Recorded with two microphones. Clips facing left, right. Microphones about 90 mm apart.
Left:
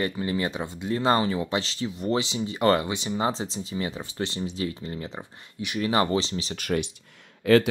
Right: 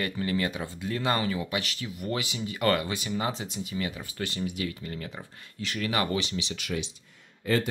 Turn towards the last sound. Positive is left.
turn(degrees=80)